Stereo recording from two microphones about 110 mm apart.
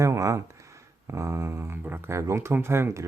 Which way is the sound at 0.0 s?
30° right (ahead or behind).